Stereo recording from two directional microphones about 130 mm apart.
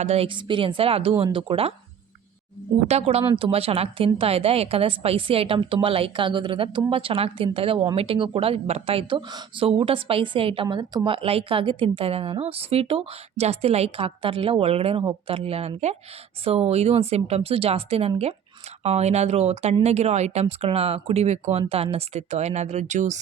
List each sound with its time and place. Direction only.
0.0 s a woman's voice: 50° right (ahead or behind)
2.8 s a woman's voice: 55° right (ahead or behind)